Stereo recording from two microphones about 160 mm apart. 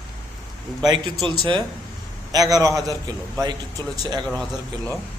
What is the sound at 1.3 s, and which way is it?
A man's voice, 30° right (ahead or behind).